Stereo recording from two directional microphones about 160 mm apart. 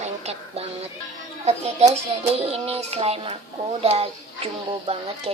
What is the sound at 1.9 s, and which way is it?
Speech, 40° right (ahead or behind).